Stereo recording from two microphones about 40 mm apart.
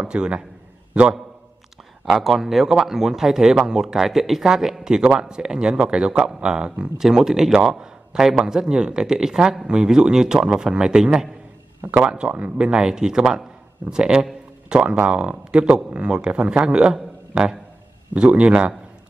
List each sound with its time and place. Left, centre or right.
0.0 s speech: right
2.0 s speech: centre; by 6.9 s right
7.0 s a man's voice: centre
18.1 s a man's voice: right